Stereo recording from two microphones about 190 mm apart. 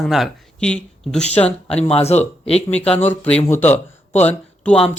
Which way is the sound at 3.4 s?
10° left (ahead or behind).